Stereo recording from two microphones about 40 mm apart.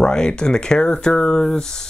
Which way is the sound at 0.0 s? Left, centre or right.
Centre.